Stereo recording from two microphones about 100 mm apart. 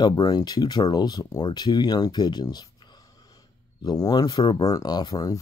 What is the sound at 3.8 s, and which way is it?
Speech, 40° left (ahead or behind).